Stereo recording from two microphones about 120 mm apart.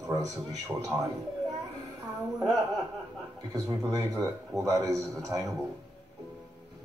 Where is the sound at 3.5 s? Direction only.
30° right (ahead or behind).